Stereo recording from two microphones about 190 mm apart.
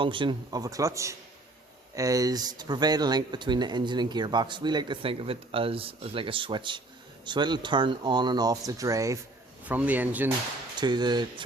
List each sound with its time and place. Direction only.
0.0 s speech: 25° right (ahead or behind); by 10.2 s 10° right (ahead or behind)
10.8 s speech: 20° right (ahead or behind)